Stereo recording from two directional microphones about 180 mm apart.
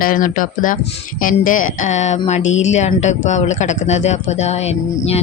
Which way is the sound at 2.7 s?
40° left (ahead or behind).